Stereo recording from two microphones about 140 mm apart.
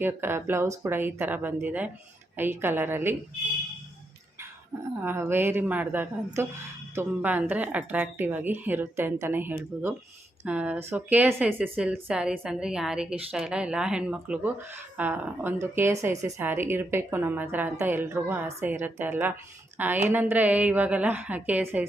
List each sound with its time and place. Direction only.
0.0 s a woman's voice: 15° right (ahead or behind)
5.0 s a woman's voice: 15° right (ahead or behind)